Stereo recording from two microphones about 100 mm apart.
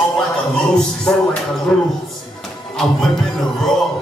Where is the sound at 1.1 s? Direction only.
10° left (ahead or behind).